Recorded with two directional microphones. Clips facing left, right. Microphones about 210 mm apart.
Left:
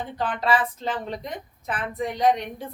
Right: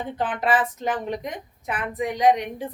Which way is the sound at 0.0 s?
20° right (ahead or behind).